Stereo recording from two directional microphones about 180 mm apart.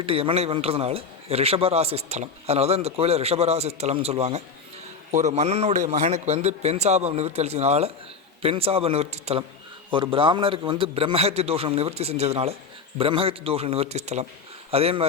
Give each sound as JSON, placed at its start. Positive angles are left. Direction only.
{"t": 0.0, "sound": "a man's voice", "side_deg": -30}